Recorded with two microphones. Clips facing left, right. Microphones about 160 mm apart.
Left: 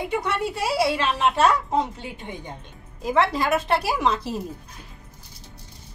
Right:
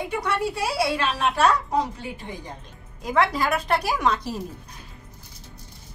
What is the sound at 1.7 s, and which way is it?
Speech, 25° left (ahead or behind).